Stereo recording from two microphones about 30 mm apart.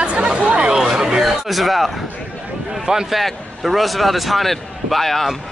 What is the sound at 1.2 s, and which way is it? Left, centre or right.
Speech, centre.